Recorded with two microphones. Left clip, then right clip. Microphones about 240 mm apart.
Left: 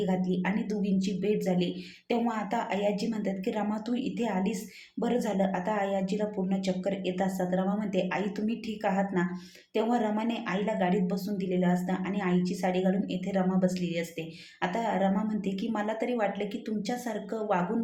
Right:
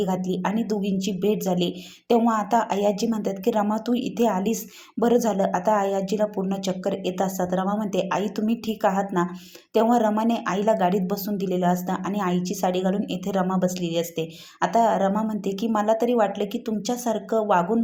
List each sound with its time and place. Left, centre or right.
0.0 s speech: right